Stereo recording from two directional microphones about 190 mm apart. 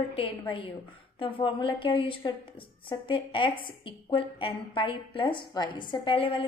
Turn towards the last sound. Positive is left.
turn(degrees=30)  # may be behind; listen again after turning